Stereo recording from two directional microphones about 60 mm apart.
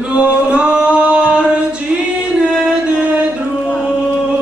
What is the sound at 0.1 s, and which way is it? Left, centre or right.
Singing, centre.